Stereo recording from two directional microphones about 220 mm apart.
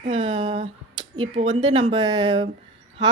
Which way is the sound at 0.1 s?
25° right (ahead or behind).